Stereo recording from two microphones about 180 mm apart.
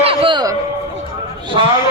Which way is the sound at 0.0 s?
30° right (ahead or behind).